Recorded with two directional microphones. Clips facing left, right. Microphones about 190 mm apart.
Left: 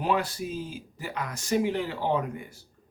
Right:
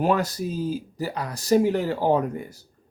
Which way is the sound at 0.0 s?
45° right (ahead or behind).